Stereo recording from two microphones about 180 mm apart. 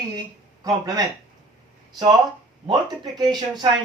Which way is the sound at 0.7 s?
20° right (ahead or behind).